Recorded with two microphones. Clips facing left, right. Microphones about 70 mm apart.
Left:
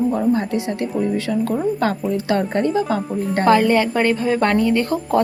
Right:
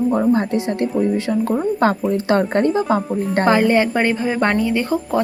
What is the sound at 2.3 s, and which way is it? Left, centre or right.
Speech, right.